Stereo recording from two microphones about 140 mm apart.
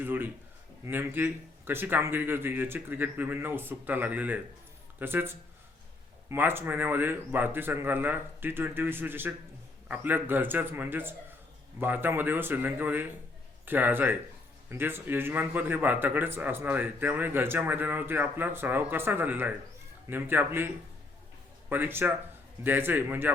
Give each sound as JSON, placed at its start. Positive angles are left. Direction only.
{"t": 0.0, "sound": "a man's voice", "side_deg": -15}
{"t": 6.3, "sound": "a man's voice", "side_deg": -15}
{"t": 21.7, "sound": "a man's voice", "side_deg": -15}